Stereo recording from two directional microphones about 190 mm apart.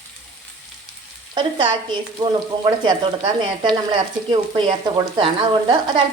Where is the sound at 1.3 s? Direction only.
25° right (ahead or behind).